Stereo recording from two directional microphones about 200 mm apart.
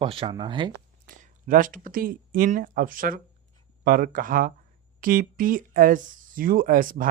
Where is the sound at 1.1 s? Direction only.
40° right (ahead or behind).